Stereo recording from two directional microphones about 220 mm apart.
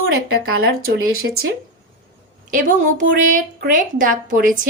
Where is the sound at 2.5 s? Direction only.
35° right (ahead or behind).